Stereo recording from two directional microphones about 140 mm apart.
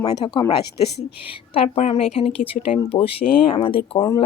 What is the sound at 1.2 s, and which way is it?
A woman's voice, 40° left (ahead or behind).